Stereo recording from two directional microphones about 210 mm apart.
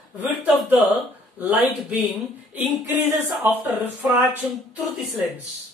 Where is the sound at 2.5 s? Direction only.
10° right (ahead or behind).